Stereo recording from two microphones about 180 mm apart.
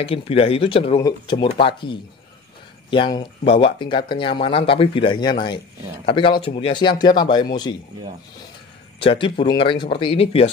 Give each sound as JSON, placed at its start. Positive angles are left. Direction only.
{"t": 0.0, "sound": "speech", "side_deg": 30}
{"t": 9.0, "sound": "speech", "side_deg": 30}